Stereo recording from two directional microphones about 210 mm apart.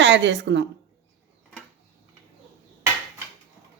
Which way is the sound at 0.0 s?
55° right (ahead or behind).